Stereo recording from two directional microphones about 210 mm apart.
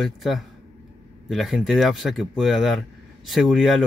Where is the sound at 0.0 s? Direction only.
Centre (ahead or behind).